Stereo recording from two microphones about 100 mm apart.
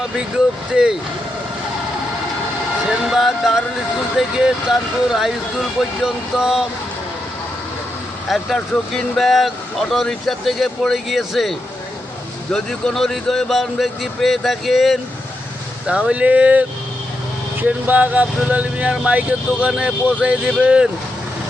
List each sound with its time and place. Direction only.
0.7 s speech: 5° right (ahead or behind)
3.0 s speech: 5° right (ahead or behind)
8.3 s speech: centre (ahead or behind)
15.9 s speech: 10° right (ahead or behind)